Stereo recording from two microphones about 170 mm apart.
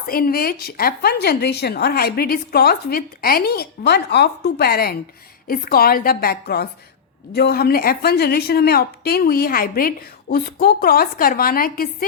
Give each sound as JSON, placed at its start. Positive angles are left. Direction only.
{"t": 0.1, "sound": "a woman's voice", "side_deg": 60}